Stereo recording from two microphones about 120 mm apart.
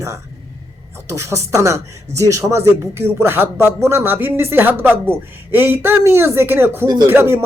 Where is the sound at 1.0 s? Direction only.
25° right (ahead or behind).